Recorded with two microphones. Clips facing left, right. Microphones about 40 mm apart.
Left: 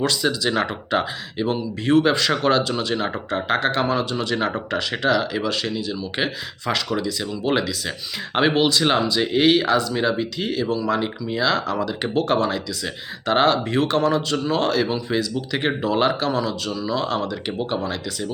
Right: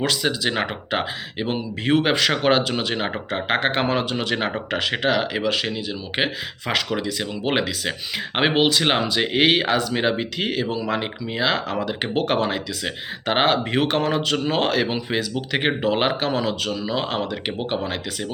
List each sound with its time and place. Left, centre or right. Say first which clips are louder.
0.0 s speech: left 1 dB; right
10.7 s speech: left 2 dB; right